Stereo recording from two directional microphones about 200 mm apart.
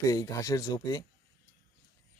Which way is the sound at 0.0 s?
15° left (ahead or behind).